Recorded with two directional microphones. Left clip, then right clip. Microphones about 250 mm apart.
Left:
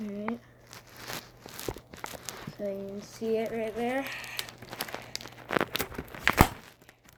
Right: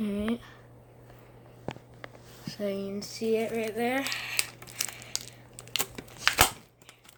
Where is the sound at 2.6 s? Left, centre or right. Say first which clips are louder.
Right 3 dB; right.